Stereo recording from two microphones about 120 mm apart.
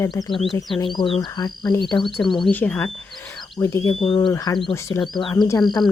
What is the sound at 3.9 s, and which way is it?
Speech, 50° left (ahead or behind).